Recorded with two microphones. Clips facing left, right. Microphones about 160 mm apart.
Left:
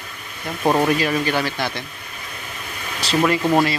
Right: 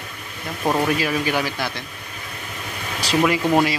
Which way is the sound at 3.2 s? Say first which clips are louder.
Left 1 dB; 5° right (ahead or behind).